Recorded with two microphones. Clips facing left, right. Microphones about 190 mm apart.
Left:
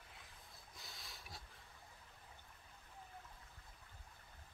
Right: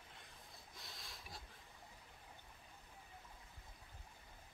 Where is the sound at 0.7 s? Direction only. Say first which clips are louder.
Even; centre (ahead or behind).